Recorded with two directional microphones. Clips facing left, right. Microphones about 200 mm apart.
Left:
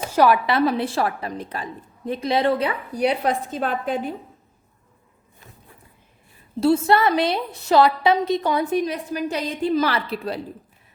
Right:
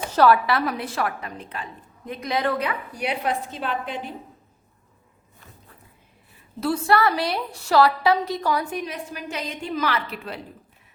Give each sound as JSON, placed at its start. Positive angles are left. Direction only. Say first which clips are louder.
{"t": 0.1, "sound": "a woman's voice", "louder": "even", "side_deg": 15}
{"t": 6.6, "sound": "a woman's voice", "louder": "left 4 dB", "side_deg": 25}
{"t": 8.8, "sound": "a woman's voice", "louder": "left 7 dB", "side_deg": 40}